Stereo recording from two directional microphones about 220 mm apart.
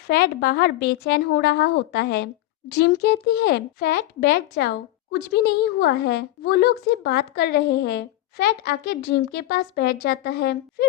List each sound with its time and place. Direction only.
0.1 s a woman's voice: 45° left (ahead or behind)